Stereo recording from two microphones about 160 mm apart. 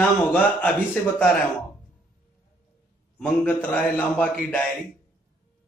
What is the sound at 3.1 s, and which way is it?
A man's voice, 10° left (ahead or behind).